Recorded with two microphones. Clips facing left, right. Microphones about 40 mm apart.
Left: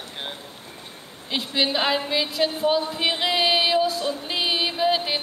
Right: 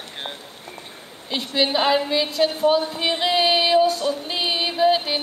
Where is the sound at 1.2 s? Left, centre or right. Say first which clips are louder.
Right 2 dB; centre.